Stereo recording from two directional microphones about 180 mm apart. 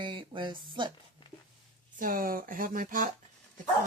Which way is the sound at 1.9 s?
50° right (ahead or behind).